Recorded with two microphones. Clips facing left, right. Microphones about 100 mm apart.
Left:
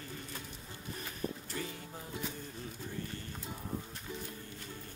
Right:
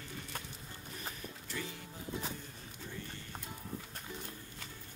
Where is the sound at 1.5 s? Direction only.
40° left (ahead or behind).